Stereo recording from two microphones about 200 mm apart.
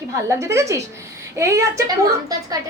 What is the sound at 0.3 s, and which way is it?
A woman's voice, 15° right (ahead or behind).